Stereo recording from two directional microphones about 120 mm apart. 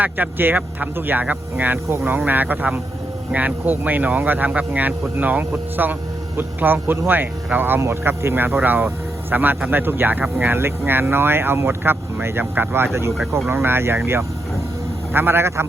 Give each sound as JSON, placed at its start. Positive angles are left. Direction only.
{"t": 0.0, "sound": "speech", "side_deg": -15}